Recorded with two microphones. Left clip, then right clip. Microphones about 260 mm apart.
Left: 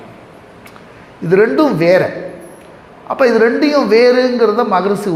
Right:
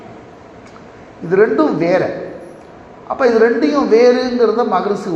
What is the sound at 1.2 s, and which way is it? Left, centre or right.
Speech, left.